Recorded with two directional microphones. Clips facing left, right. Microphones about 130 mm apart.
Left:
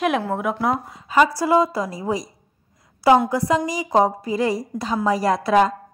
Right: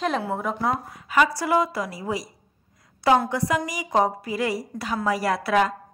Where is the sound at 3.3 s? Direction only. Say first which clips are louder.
Left 4 dB; 20° left (ahead or behind).